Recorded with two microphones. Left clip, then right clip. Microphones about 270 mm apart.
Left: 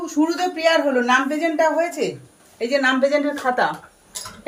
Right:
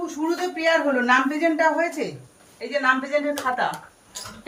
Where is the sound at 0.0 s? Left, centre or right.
Left.